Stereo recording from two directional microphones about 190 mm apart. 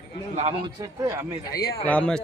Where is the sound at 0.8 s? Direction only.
15° right (ahead or behind).